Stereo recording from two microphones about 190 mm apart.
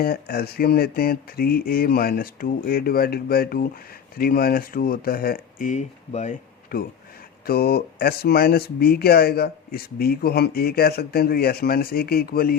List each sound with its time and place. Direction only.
0.0 s speech: 50° left (ahead or behind); by 6.3 s 35° left (ahead or behind)
7.4 s speech: 55° left (ahead or behind)